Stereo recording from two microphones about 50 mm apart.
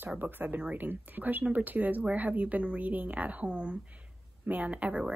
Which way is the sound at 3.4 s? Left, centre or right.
Right.